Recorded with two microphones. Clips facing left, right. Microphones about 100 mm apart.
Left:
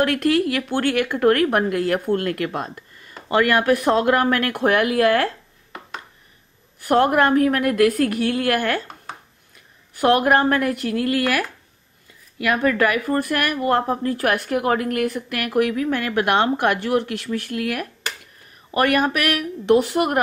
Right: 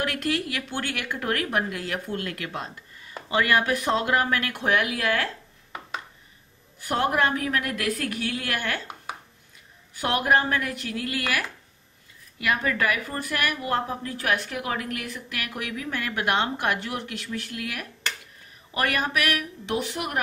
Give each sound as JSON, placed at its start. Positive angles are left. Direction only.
{"t": 0.0, "sound": "speech", "side_deg": 55}
{"t": 6.8, "sound": "speech", "side_deg": 50}
{"t": 9.1, "sound": "chopping", "side_deg": -10}
{"t": 9.9, "sound": "speech", "side_deg": 50}